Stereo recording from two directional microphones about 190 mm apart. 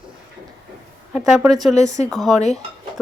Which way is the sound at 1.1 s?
5° right (ahead or behind).